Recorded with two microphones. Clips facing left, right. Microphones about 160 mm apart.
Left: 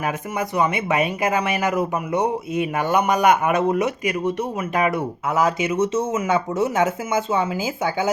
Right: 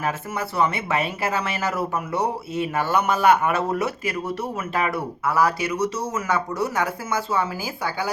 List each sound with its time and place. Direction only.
0.3 s speech: 15° left (ahead or behind)